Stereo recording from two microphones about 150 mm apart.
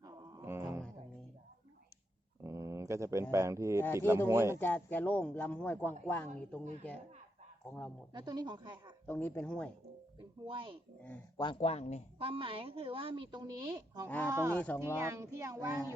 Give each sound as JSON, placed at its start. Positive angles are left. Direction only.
{"t": 0.0, "sound": "a sound", "side_deg": -25}
{"t": 2.4, "sound": "a sound", "side_deg": -20}
{"t": 3.3, "sound": "speech", "side_deg": -20}
{"t": 4.5, "sound": "speech", "side_deg": 15}
{"t": 7.7, "sound": "speech", "side_deg": 10}
{"t": 8.1, "sound": "speech", "side_deg": -30}
{"t": 9.0, "sound": "speech", "side_deg": 10}
{"t": 10.4, "sound": "a woman's voice", "side_deg": -35}
{"t": 11.6, "sound": "speech", "side_deg": 45}
{"t": 12.2, "sound": "a woman's voice", "side_deg": -35}